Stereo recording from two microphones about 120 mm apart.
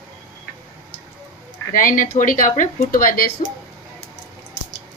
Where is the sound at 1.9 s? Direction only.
90° left.